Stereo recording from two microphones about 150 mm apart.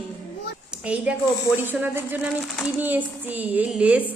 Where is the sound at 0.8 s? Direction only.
10° right (ahead or behind).